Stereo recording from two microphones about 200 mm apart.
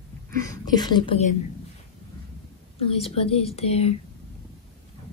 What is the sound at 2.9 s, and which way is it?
Speech, 30° left (ahead or behind).